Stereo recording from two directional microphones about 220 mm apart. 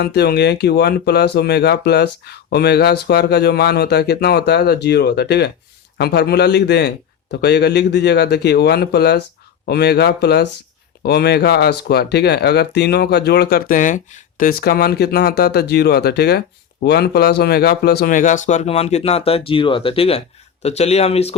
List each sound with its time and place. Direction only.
0.0 s speech: 45° left (ahead or behind); by 21.3 s 30° left (ahead or behind)